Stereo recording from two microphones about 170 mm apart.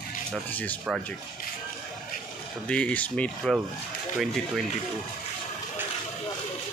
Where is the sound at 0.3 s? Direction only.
10° left (ahead or behind).